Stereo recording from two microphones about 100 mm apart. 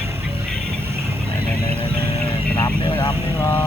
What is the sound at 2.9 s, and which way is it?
Vehicle, 45° left (ahead or behind).